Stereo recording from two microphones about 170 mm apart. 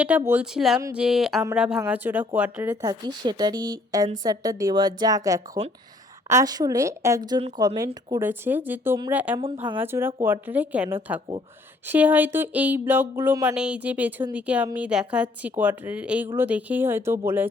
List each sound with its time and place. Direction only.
0.0 s speech: 10° right (ahead or behind)
2.8 s speech: 25° right (ahead or behind)
8.2 s speech: 10° right (ahead or behind)